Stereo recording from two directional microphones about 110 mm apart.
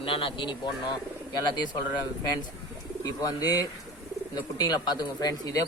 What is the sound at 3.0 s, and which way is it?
A man's voice, 35° left (ahead or behind).